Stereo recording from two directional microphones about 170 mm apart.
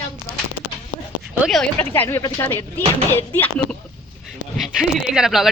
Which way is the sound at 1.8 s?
10° left (ahead or behind).